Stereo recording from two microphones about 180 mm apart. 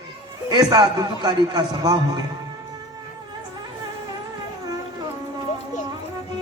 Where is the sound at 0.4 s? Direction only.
20° right (ahead or behind).